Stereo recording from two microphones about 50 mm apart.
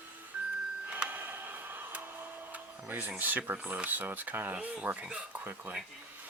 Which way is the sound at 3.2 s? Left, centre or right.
Right.